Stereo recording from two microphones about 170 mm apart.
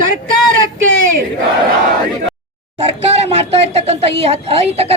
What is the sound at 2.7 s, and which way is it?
Speech, 40° right (ahead or behind).